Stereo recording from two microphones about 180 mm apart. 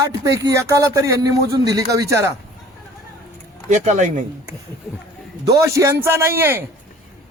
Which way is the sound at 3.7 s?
40° right (ahead or behind).